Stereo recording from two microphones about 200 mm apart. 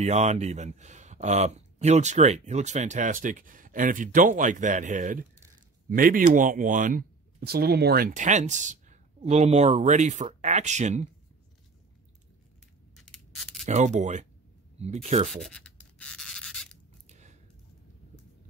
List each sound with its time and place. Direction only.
0.0 s speech: 35° right (ahead or behind)
12.9 s crushing: centre (ahead or behind)
13.7 s speech: 35° right (ahead or behind)
15.4 s writing: 5° left (ahead or behind)
17.1 s a sound: 35° right (ahead or behind)